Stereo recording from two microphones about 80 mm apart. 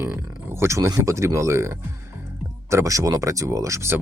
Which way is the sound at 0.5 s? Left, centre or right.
Right.